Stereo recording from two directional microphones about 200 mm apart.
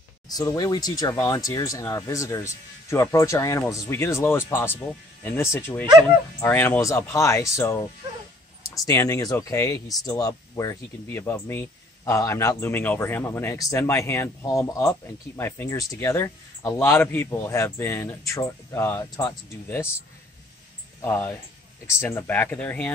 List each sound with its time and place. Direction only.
0.3 s speech: 20° left (ahead or behind)
8.8 s speech: 15° left (ahead or behind)
21.0 s speech: 10° left (ahead or behind)